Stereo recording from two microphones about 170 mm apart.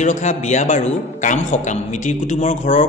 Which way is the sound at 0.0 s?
45° left (ahead or behind).